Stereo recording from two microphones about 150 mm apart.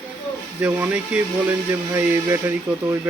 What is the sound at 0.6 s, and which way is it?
Speech, 10° right (ahead or behind).